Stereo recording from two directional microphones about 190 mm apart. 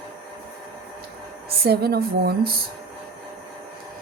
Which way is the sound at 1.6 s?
55° right (ahead or behind).